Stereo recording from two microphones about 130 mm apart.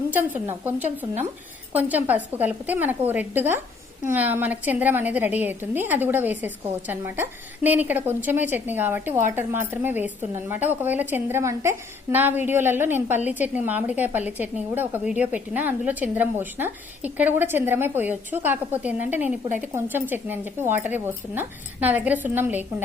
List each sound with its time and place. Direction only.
0.1 s a woman's voice: 15° right (ahead or behind)